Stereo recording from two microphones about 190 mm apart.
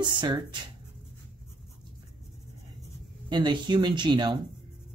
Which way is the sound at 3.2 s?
25° right (ahead or behind).